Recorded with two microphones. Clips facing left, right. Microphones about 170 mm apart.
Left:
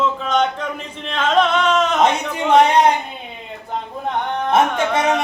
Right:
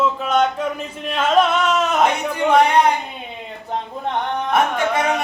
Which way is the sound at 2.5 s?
20° left (ahead or behind).